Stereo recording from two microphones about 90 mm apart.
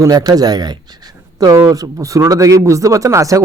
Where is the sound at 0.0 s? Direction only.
45° right (ahead or behind).